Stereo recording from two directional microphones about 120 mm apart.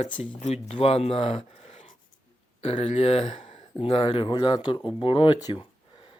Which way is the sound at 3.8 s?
50° left (ahead or behind).